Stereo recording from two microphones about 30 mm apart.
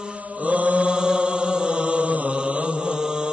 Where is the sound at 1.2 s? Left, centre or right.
Right.